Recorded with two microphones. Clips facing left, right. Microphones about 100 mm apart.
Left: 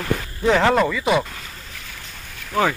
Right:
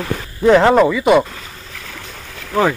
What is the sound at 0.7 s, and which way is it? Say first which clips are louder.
Speech: right 7 dB; 10° right (ahead or behind).